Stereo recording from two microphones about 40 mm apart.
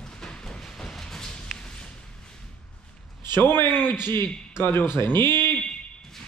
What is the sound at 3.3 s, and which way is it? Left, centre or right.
Speech, left.